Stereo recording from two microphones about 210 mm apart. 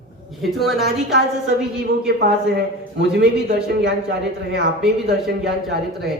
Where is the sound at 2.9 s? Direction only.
50° right (ahead or behind).